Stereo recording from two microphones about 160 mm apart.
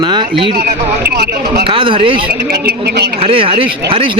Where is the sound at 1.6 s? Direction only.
35° right (ahead or behind).